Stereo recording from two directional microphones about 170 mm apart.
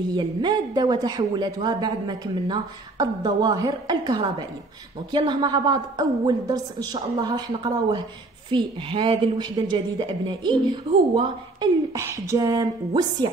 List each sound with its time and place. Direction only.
0.1 s a woman's voice: 25° right (ahead or behind)